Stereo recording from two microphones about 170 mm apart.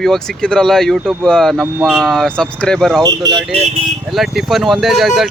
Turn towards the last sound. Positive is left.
turn(degrees=0)  # may be behind; listen again after turning